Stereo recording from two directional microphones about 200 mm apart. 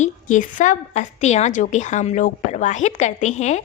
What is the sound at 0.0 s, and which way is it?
A woman's voice, 40° left (ahead or behind).